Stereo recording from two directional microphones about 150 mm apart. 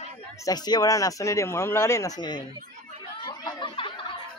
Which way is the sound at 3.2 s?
30° left (ahead or behind).